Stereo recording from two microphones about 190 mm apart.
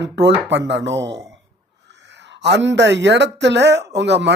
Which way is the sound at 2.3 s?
65° right (ahead or behind).